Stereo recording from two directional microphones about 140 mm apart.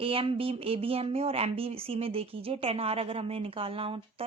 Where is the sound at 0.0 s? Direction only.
40° right (ahead or behind).